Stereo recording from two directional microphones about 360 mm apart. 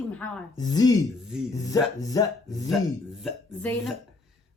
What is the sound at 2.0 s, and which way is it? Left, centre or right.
Speech, centre.